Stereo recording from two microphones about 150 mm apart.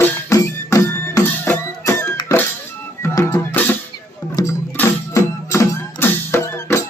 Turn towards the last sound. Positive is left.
turn(degrees=20)  # may be behind; listen again after turning